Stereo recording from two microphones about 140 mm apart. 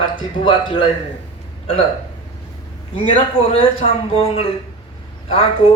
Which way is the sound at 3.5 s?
40° left (ahead or behind).